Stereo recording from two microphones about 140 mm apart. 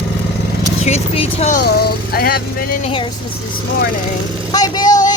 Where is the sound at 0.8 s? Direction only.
50° left (ahead or behind).